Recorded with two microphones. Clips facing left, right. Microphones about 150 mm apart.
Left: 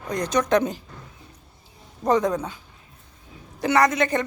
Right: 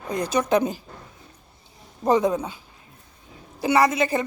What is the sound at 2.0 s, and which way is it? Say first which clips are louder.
Speech: right 1 dB; 10° right (ahead or behind).